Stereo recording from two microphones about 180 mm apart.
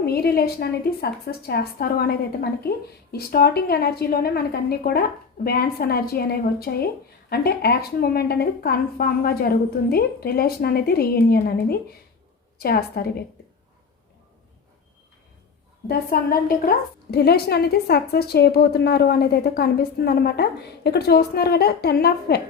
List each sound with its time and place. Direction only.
0.0 s a woman's voice: 60° left (ahead or behind)
12.5 s a woman's voice: 60° left (ahead or behind)
15.9 s a woman's voice: 55° left (ahead or behind)